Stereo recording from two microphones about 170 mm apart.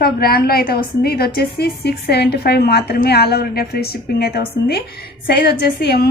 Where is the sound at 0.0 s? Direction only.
65° left (ahead or behind).